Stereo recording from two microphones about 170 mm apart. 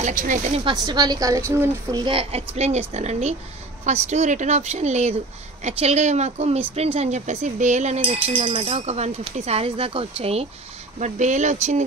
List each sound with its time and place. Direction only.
0.0 s speech: 50° right (ahead or behind)
0.7 s a woman's voice: 25° right (ahead or behind); by 11.8 s 40° right (ahead or behind)